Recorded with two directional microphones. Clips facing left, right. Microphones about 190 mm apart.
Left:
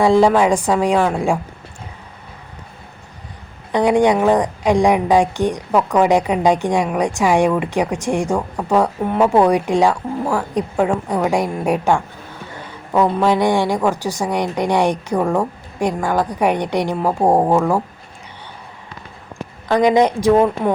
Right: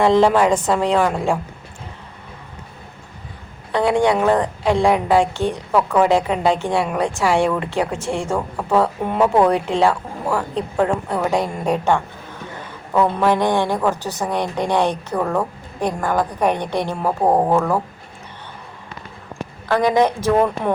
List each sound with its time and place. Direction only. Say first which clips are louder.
0.0 s a woman's voice: left 1 dB; 10° left (ahead or behind)
3.7 s a woman's voice: left 3 dB; 15° left (ahead or behind)
19.6 s a woman's voice: left 3 dB; 15° left (ahead or behind)